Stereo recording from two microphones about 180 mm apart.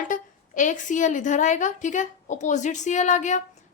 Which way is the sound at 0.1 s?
45° left (ahead or behind).